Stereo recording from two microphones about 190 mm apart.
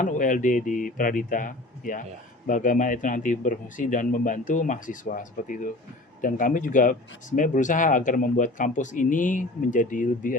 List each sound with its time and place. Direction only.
0.0 s speech: 45° left (ahead or behind)